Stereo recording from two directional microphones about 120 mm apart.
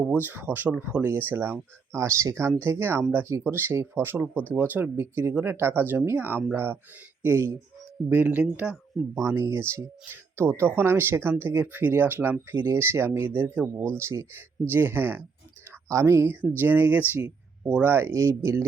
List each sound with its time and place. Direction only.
0.0 s speech: 10° right (ahead or behind)
9.1 s speech: 20° right (ahead or behind)